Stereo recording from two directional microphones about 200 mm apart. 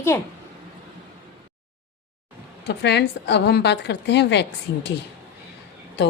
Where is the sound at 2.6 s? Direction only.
60° left (ahead or behind).